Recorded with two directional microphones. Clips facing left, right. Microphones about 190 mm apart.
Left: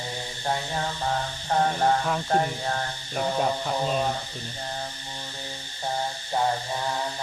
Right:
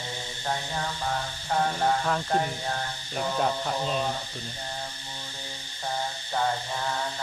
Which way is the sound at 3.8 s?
45° left (ahead or behind).